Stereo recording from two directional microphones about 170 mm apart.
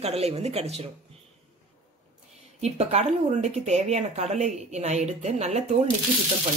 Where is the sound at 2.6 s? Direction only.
40° right (ahead or behind).